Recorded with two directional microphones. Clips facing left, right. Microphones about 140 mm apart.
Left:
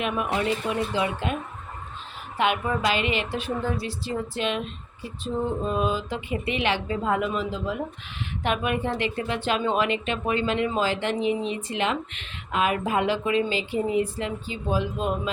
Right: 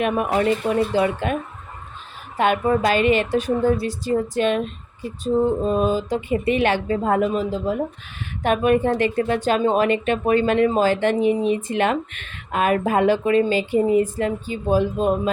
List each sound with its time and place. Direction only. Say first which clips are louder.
0.0 s speech: right 6 dB; 45° right (ahead or behind)
2.4 s speech: right 6 dB; 45° right (ahead or behind)